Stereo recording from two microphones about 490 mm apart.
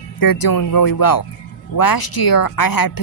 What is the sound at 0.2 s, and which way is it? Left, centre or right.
Speech, left.